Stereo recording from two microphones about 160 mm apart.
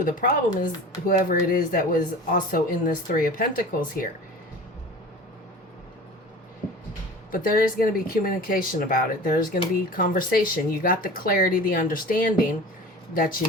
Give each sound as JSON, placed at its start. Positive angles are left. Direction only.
{"t": 0.0, "sound": "speech", "side_deg": 60}
{"t": 7.3, "sound": "speech", "side_deg": 60}